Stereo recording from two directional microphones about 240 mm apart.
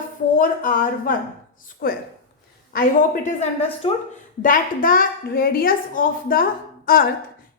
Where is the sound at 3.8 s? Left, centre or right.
Left.